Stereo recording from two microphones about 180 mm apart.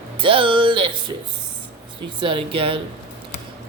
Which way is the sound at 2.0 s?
30° right (ahead or behind).